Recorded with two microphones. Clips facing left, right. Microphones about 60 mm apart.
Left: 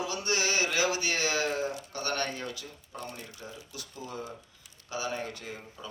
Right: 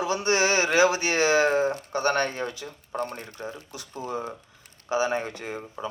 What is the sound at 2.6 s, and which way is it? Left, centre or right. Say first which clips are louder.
Speech: right 10 dB; right.